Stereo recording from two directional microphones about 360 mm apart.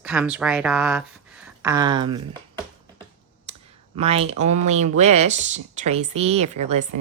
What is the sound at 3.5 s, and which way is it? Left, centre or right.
Clicking, centre.